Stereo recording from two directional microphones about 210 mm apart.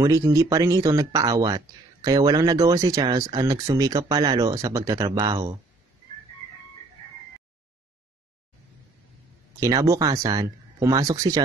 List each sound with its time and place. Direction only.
0.0 s speech: 15° right (ahead or behind)
9.6 s speech: 15° right (ahead or behind)